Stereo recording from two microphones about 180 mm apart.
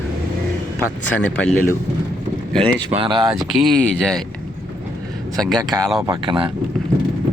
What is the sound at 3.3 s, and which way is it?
Speech, centre (ahead or behind).